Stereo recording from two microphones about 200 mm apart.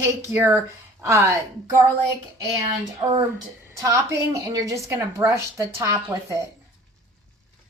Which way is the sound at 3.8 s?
15° right (ahead or behind).